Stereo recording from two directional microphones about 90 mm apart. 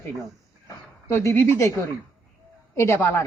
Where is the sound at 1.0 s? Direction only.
30° left (ahead or behind).